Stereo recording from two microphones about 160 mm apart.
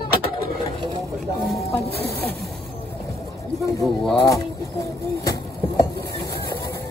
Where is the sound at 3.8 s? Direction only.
5° left (ahead or behind).